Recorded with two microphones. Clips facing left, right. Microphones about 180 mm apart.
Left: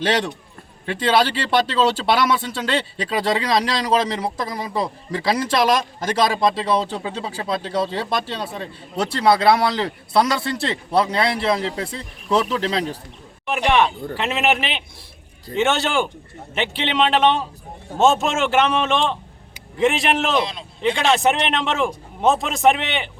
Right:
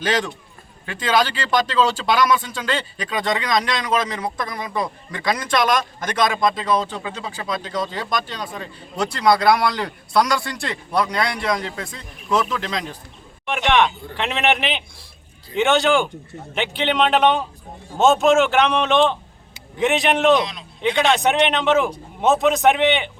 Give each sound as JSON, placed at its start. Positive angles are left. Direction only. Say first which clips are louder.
{"t": 0.0, "sound": "speech", "louder": "left 1 dB", "side_deg": 30}
{"t": 13.5, "sound": "a man's voice", "louder": "even", "side_deg": 5}
{"t": 20.4, "sound": "speech", "louder": "left 1 dB", "side_deg": 30}
{"t": 20.8, "sound": "a man's voice", "louder": "even", "side_deg": 0}